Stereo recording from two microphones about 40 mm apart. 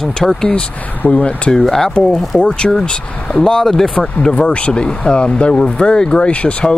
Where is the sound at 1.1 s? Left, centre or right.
Left.